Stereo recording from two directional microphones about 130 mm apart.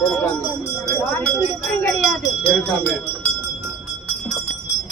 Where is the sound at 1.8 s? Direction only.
5° left (ahead or behind).